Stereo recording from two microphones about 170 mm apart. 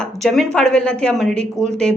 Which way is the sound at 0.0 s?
Centre (ahead or behind).